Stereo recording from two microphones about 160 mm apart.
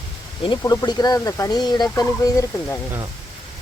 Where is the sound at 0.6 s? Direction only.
20° left (ahead or behind).